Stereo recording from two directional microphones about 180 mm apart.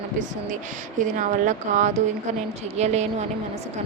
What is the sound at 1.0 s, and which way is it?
A woman's voice, 45° right (ahead or behind).